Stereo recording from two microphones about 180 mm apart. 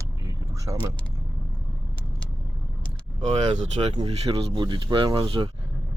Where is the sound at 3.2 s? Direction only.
35° right (ahead or behind).